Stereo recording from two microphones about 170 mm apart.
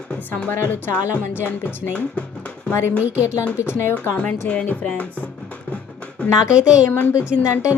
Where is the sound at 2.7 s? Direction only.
15° left (ahead or behind).